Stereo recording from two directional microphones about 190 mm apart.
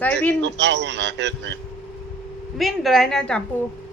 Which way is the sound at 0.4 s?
70° right (ahead or behind).